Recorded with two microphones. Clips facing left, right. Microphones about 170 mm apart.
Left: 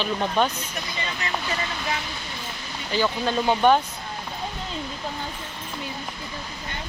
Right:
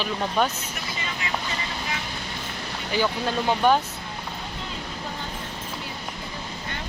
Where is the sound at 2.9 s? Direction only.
10° right (ahead or behind).